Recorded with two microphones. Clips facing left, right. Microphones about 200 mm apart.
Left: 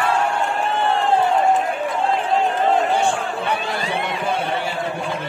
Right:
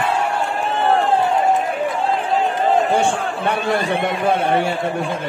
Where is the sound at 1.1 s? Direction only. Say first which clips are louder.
Even; centre (ahead or behind).